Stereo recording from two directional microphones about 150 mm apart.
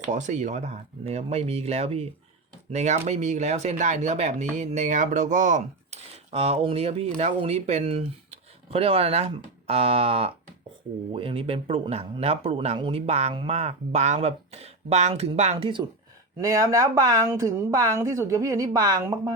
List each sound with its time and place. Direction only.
0.1 s speech: 55° right (ahead or behind)
16.4 s a woman's voice: 20° right (ahead or behind)